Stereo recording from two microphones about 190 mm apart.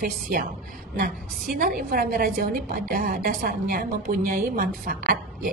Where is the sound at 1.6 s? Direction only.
50° right (ahead or behind).